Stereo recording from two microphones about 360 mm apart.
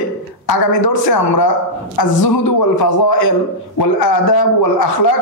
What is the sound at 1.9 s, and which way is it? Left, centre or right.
A woman's voice, left.